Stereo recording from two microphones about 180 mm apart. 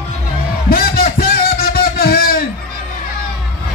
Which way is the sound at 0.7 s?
55° left (ahead or behind).